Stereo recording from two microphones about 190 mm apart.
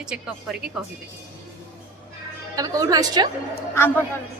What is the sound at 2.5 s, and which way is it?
Speech, 20° right (ahead or behind).